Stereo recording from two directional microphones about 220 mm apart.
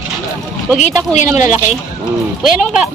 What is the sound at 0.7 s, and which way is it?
Speech, 35° left (ahead or behind).